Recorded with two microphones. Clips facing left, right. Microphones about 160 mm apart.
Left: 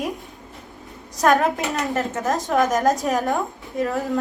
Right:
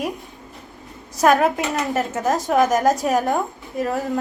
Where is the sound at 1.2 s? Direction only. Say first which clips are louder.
Right 2 dB; centre (ahead or behind).